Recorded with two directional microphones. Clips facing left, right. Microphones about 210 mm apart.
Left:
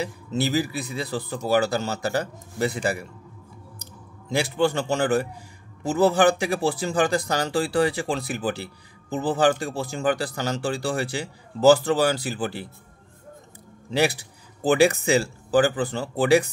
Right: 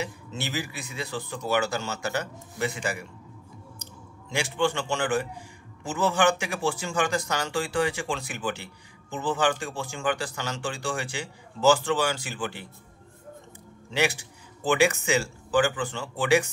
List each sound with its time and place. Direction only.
0.0 s speech: 35° left (ahead or behind)
4.3 s speech: 35° left (ahead or behind)
13.8 s speech: 35° left (ahead or behind)